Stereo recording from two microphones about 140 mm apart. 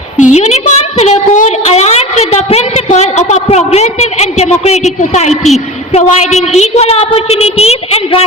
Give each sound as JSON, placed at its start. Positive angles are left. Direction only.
{"t": 0.2, "sound": "a woman's voice", "side_deg": 55}